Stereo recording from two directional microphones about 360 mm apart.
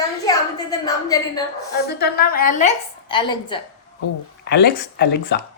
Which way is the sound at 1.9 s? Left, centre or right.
Left.